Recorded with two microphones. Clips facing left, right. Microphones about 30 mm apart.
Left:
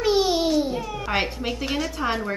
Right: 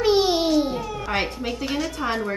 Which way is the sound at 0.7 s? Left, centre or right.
Centre.